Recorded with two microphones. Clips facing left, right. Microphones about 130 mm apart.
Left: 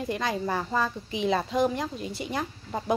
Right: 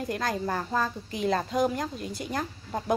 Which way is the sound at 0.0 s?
Centre (ahead or behind).